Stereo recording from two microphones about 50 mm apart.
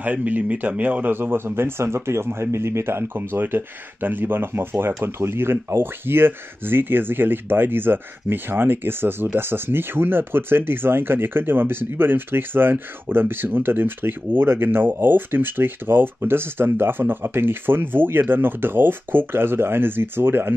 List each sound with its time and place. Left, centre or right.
0.0 s speech: right